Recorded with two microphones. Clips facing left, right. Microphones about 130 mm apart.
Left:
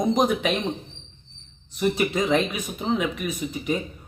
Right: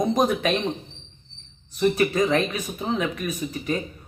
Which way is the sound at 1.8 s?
15° left (ahead or behind).